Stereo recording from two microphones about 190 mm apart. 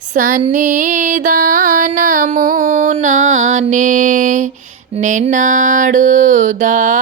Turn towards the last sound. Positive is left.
turn(degrees=-40)  # may be behind; listen again after turning